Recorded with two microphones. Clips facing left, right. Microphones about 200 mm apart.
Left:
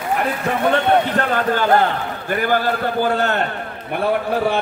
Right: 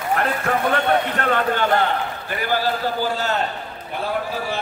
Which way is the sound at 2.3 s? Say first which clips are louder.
Left 4 dB; 55° left (ahead or behind).